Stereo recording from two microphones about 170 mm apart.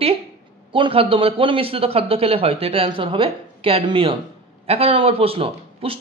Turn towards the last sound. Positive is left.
turn(degrees=-35)  # may be behind; listen again after turning